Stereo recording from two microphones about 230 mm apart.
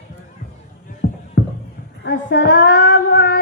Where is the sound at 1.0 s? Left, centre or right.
Left.